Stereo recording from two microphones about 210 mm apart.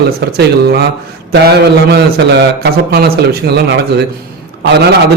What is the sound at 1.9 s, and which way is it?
A man's voice, 50° right (ahead or behind).